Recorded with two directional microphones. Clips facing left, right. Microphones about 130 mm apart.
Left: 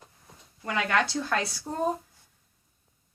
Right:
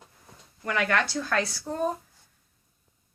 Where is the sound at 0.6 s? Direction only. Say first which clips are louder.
Even; 20° left (ahead or behind).